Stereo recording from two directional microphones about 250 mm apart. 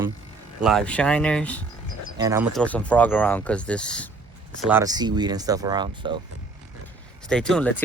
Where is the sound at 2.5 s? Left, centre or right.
Centre.